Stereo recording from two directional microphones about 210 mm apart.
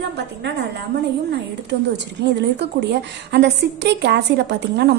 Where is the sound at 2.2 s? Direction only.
55° right (ahead or behind).